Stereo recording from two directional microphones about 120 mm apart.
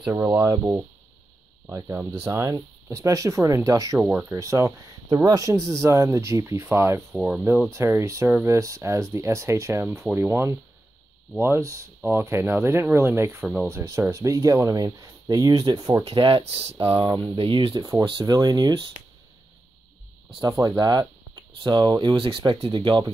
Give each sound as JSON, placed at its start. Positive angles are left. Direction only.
{"t": 0.1, "sound": "speech", "side_deg": -20}
{"t": 4.0, "sound": "speech", "side_deg": -10}
{"t": 4.3, "sound": "speech", "side_deg": -25}
{"t": 7.1, "sound": "speech", "side_deg": -5}
{"t": 7.7, "sound": "speech", "side_deg": -25}
{"t": 16.0, "sound": "speech", "side_deg": -50}
{"t": 16.9, "sound": "speech", "side_deg": -20}
{"t": 17.2, "sound": "speech", "side_deg": -45}
{"t": 18.2, "sound": "speech", "side_deg": -30}
{"t": 20.4, "sound": "speech", "side_deg": -25}